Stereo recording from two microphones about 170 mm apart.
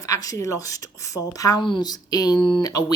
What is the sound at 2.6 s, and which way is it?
Speech, 20° left (ahead or behind).